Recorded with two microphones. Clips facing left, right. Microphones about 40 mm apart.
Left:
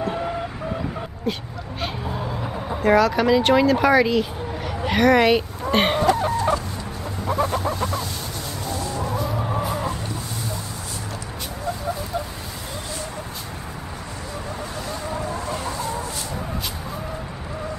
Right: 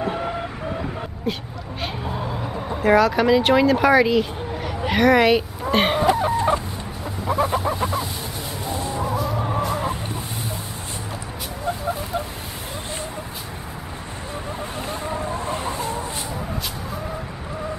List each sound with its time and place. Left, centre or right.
0.0 s a sound: centre
1.3 s speech: centre
6.0 s chicken: centre
7.2 s a sound: centre
8.6 s chicken: right
9.1 s chicken: centre
14.9 s chicken: right